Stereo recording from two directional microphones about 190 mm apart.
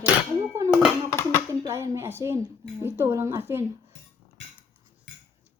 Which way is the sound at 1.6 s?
15° right (ahead or behind).